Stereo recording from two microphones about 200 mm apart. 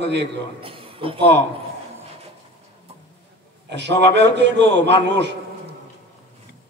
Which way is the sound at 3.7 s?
60° right (ahead or behind).